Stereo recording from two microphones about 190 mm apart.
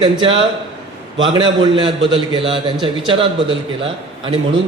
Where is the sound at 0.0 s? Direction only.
25° right (ahead or behind).